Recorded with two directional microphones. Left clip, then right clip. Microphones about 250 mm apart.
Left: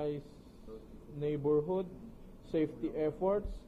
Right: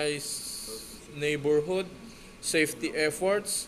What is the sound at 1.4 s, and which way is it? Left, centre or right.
Speech, right.